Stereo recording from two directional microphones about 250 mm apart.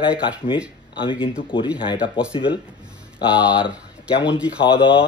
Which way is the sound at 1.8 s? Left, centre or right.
Centre.